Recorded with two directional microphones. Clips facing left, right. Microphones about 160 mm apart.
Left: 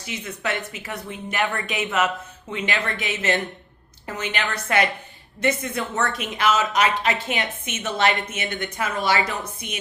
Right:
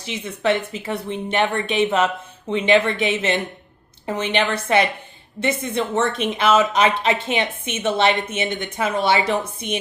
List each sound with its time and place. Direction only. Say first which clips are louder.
0.1 s a woman's voice: right 7 dB; 30° right (ahead or behind)